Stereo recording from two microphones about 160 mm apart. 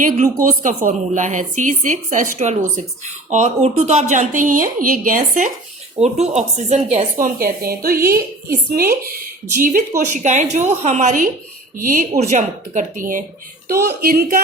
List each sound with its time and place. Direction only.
0.0 s a woman's voice: 60° right (ahead or behind)
3.2 s a woman's voice: 45° right (ahead or behind)
6.0 s a woman's voice: 45° right (ahead or behind); by 9.8 s 60° right (ahead or behind)
10.1 s a woman's voice: 50° right (ahead or behind)
13.7 s a woman's voice: 70° right (ahead or behind)